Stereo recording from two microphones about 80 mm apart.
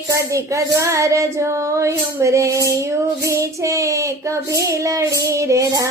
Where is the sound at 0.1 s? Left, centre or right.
Right.